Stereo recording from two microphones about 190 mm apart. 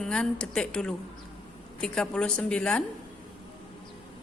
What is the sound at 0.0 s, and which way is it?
A woman's voice, 5° left (ahead or behind).